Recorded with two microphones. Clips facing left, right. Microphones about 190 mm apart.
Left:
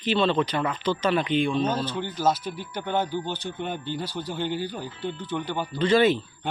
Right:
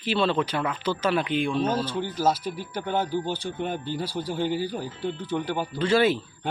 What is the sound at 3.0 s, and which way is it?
Speech, 35° right (ahead or behind).